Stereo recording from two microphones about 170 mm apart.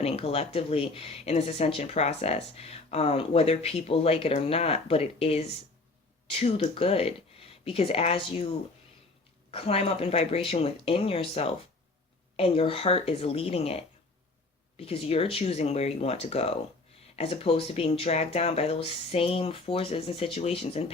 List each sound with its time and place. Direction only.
0.0 s speech: 35° left (ahead or behind)
9.5 s speech: 35° left (ahead or behind)